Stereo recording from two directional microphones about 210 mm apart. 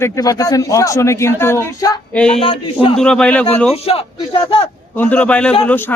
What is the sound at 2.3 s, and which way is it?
Speech, 25° left (ahead or behind).